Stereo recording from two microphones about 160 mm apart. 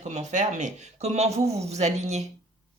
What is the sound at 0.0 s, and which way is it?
Speech, 45° right (ahead or behind).